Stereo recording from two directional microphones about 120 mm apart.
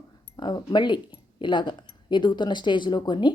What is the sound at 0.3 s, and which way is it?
Speech, 40° left (ahead or behind).